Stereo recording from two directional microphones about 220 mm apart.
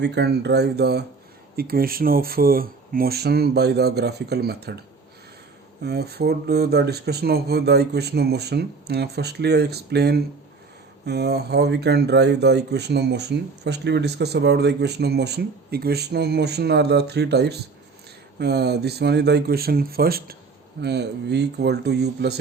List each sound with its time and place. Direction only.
0.0 s speech: 50° right (ahead or behind)
5.8 s speech: 45° right (ahead or behind)